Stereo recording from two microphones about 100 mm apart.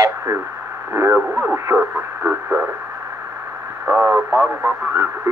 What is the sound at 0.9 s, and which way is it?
Speech, 30° right (ahead or behind).